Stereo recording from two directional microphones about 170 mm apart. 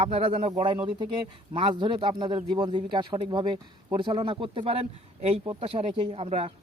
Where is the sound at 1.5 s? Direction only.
30° right (ahead or behind).